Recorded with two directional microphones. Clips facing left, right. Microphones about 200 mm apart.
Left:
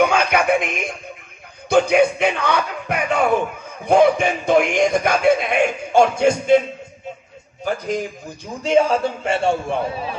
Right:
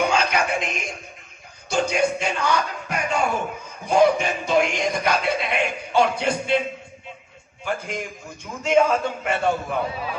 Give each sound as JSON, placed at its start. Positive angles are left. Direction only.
{"t": 0.1, "sound": "music", "side_deg": 55}
{"t": 1.7, "sound": "a sound", "side_deg": 60}
{"t": 3.8, "sound": "a man's voice", "side_deg": 55}
{"t": 7.6, "sound": "a man's voice", "side_deg": 40}